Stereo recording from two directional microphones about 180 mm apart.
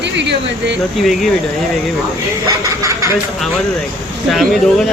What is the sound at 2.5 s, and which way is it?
Speech, 15° right (ahead or behind).